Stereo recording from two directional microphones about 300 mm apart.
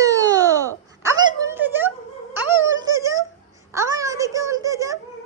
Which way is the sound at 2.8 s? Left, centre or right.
Centre.